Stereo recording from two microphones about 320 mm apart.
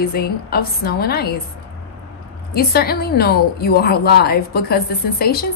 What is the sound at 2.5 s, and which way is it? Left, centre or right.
A woman's voice, left.